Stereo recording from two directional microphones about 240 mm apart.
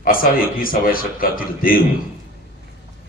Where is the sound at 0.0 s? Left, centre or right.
Left.